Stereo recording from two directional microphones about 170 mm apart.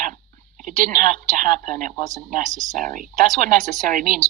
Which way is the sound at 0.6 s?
50° right (ahead or behind).